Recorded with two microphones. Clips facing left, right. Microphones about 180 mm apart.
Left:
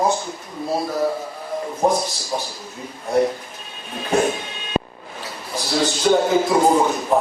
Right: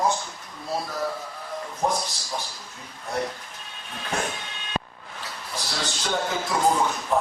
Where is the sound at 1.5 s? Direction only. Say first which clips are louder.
Left 8 dB; 5° left (ahead or behind).